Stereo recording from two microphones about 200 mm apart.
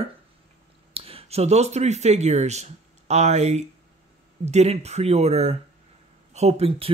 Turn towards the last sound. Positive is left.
turn(degrees=-30)  # may be behind; listen again after turning